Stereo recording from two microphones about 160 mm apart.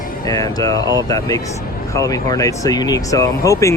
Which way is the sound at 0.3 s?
25° left (ahead or behind).